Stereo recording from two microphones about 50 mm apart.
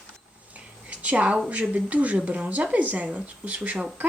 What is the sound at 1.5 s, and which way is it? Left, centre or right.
Speech, right.